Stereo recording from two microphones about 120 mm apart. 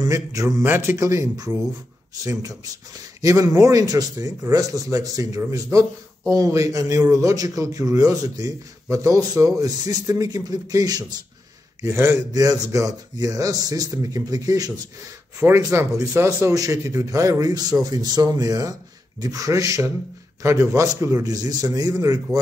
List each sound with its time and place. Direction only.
0.0 s speech: 30° right (ahead or behind)
11.8 s speech: 25° right (ahead or behind)